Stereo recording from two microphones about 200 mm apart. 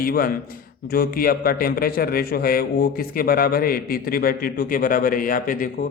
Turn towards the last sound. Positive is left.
turn(degrees=45)  # may be behind; listen again after turning